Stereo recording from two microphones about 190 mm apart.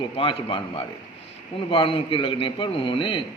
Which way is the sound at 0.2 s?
25° left (ahead or behind).